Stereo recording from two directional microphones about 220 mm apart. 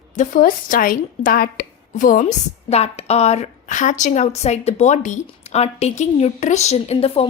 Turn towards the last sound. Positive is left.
turn(degrees=25)  # may be behind; listen again after turning